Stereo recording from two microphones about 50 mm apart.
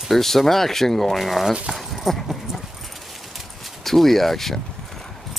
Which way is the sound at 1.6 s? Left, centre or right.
Centre.